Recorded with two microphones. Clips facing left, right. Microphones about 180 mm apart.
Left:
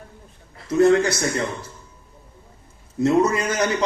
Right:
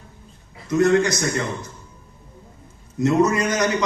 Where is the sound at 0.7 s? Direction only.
30° left (ahead or behind).